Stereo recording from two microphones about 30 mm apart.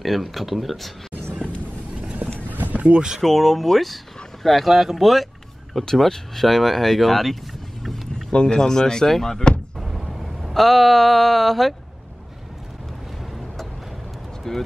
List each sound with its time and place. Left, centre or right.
0.0 s speech: centre
2.4 s vehicle: right
3.2 s speech: centre
5.9 s speech: centre
8.3 s speech: left
8.5 s speech: left
9.8 s a sound: centre
10.5 s speech: centre
14.5 s speech: centre